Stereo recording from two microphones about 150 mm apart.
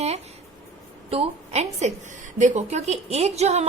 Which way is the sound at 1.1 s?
45° right (ahead or behind).